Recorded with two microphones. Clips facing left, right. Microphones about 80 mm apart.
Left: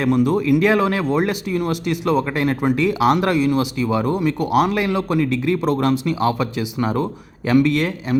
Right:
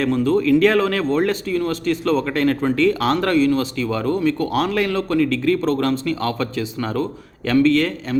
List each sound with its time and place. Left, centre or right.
0.0 s speech: centre